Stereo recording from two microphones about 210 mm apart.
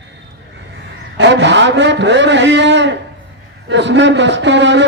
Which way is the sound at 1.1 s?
55° right (ahead or behind).